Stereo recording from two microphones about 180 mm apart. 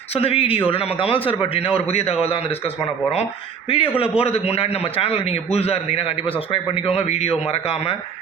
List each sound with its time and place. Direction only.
0.1 s a man's voice: 30° left (ahead or behind)